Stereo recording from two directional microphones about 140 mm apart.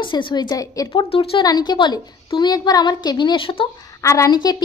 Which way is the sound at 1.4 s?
30° left (ahead or behind).